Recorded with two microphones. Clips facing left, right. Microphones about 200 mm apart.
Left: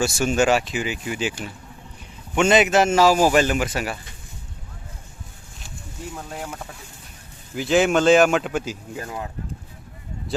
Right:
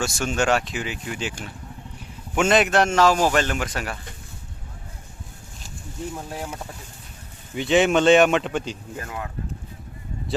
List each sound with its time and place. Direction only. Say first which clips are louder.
0.0 s a man's voice: left 4 dB; 5° left (ahead or behind)
6.1 s a man's voice: right 1 dB; 10° right (ahead or behind)
9.0 s speech: left 1 dB; 25° left (ahead or behind)